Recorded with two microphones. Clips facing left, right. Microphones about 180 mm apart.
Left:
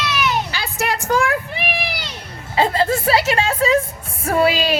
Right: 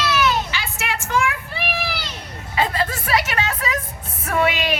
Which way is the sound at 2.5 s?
30° left (ahead or behind).